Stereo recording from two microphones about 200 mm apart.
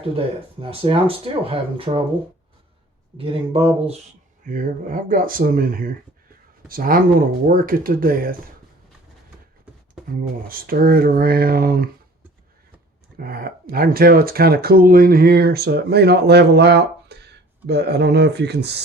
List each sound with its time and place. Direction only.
0.6 s speech: 30° right (ahead or behind)
3.2 s speech: 25° right (ahead or behind)
4.4 s speech: 40° right (ahead or behind)
10.5 s speech: 45° right (ahead or behind)
13.1 s speech: 45° right (ahead or behind)